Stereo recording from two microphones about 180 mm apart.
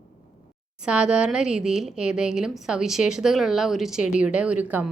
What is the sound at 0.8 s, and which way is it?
A woman's voice, 5° right (ahead or behind).